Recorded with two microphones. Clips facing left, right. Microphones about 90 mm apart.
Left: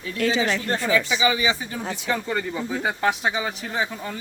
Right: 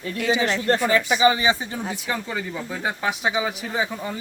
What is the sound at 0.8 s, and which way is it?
Speech, 45° right (ahead or behind).